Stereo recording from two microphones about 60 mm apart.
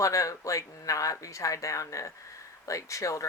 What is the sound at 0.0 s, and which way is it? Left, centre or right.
Speech, left.